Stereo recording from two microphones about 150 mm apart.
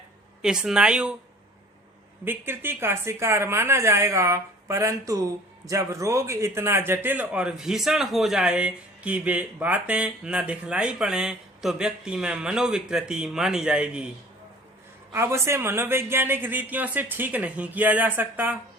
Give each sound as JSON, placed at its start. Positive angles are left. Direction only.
{"t": 0.4, "sound": "a woman's voice", "side_deg": -5}
{"t": 2.2, "sound": "a man's voice", "side_deg": -15}
{"t": 15.1, "sound": "a man's voice", "side_deg": -20}